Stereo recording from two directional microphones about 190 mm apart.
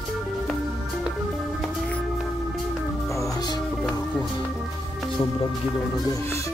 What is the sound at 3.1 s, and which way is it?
Music, 20° left (ahead or behind).